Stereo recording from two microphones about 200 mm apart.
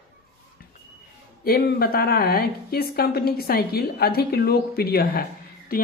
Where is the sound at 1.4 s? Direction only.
50° left (ahead or behind).